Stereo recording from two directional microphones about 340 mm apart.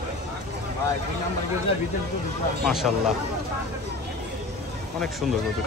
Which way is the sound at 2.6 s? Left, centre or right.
Centre.